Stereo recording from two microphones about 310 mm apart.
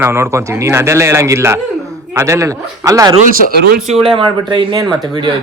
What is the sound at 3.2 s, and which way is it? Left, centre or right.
Speech, right.